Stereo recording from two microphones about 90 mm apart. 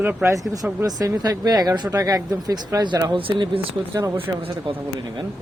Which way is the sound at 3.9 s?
40° right (ahead or behind).